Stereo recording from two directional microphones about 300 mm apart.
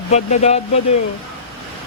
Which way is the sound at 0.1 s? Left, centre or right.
Left.